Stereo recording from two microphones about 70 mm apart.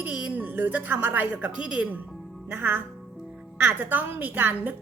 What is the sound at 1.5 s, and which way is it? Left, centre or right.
Speech, centre.